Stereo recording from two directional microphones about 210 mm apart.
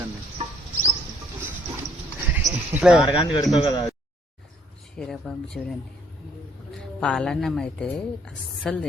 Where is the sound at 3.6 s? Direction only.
20° left (ahead or behind).